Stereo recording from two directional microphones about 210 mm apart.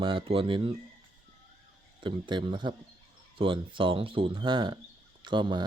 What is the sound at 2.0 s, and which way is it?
A man's voice, 20° right (ahead or behind).